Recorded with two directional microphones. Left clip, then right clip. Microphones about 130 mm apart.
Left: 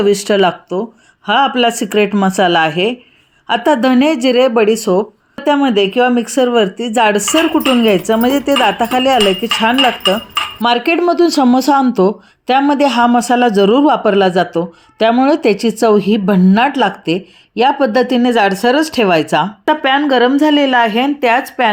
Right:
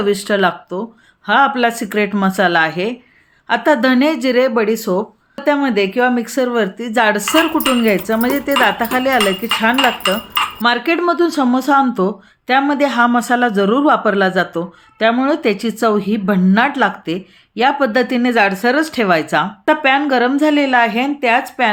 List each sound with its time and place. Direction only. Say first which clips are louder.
0.0 s speech: left 4 dB; 35° left (ahead or behind)
11.2 s speech: left 4 dB; 40° left (ahead or behind)
16.4 s speech: even; 30° left (ahead or behind)